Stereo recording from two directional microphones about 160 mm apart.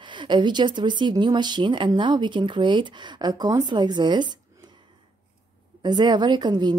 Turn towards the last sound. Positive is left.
turn(degrees=-25)  # may be behind; listen again after turning